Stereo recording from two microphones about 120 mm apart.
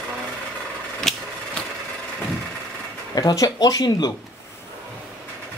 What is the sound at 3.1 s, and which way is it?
Speech, 35° left (ahead or behind).